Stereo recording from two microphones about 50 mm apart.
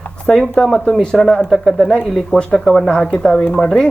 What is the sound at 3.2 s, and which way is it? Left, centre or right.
Speech, centre.